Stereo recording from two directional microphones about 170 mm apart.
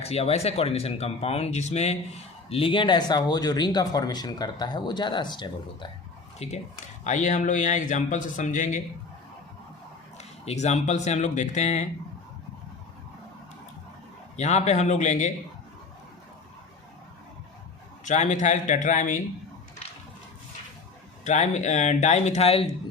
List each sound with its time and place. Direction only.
0.0 s speech: 35° left (ahead or behind)
6.4 s speech: 40° left (ahead or behind)
10.4 s speech: 40° left (ahead or behind)
14.3 s speech: 40° left (ahead or behind)
18.0 s speech: 45° left (ahead or behind)
21.2 s speech: 40° left (ahead or behind)